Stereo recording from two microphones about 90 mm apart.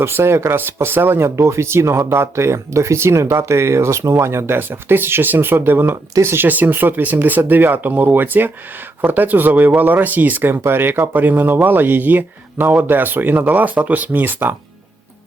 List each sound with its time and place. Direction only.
0.0 s speech: 25° right (ahead or behind)